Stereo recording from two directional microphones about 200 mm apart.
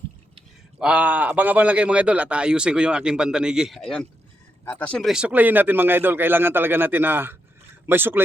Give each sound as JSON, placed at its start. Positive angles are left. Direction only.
{"t": 0.8, "sound": "a man's voice", "side_deg": -5}